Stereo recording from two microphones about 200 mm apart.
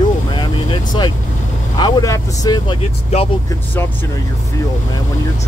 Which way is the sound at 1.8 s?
20° left (ahead or behind).